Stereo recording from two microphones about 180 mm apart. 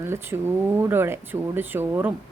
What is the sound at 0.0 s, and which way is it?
Speech, 15° right (ahead or behind).